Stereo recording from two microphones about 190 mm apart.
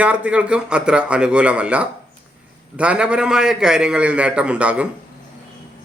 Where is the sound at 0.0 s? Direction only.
5° right (ahead or behind).